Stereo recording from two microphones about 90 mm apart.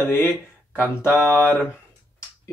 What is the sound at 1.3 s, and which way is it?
Speech, 25° right (ahead or behind).